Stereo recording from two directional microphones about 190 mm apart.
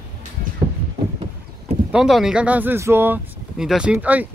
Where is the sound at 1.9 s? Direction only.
5° right (ahead or behind).